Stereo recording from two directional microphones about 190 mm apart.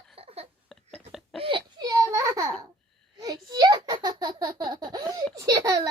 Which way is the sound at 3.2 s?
20° right (ahead or behind).